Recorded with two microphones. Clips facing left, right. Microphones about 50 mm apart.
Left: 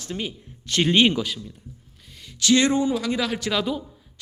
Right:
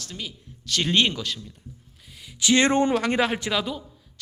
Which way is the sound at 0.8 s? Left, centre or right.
Centre.